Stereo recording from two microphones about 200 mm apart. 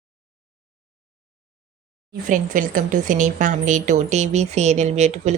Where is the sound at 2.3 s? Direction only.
45° right (ahead or behind).